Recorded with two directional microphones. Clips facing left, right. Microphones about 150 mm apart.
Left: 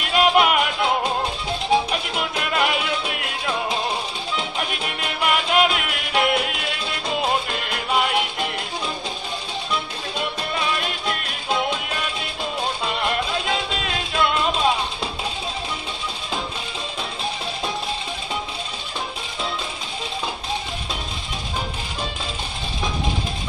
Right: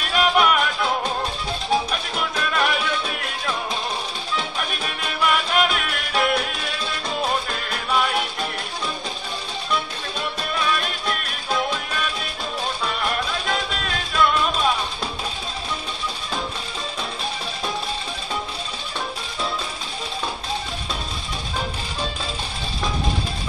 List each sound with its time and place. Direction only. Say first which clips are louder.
0.1 s music: left 2 dB; 20° left (ahead or behind)
10.1 s music: left 1 dB; 20° left (ahead or behind)